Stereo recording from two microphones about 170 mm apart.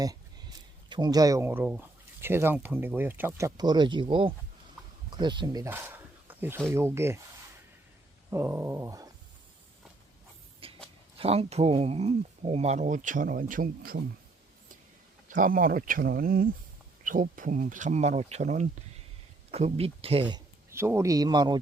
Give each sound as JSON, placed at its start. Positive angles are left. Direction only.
{"t": 0.9, "sound": "speech", "side_deg": -25}
{"t": 8.3, "sound": "speech", "side_deg": -15}
{"t": 10.6, "sound": "a sound", "side_deg": -35}
{"t": 11.2, "sound": "speech", "side_deg": -35}
{"t": 15.3, "sound": "speech", "side_deg": -55}
{"t": 20.7, "sound": "speech", "side_deg": -15}